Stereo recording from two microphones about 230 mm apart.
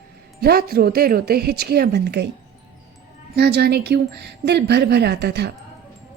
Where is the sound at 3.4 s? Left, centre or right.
Right.